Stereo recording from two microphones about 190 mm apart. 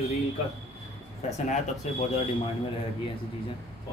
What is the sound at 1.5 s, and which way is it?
Speech, 35° left (ahead or behind).